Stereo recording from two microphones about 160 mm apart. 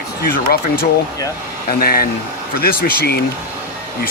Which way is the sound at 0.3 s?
70° left (ahead or behind).